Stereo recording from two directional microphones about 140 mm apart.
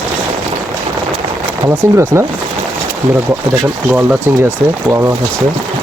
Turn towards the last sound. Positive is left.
turn(degrees=-10)  # may be behind; listen again after turning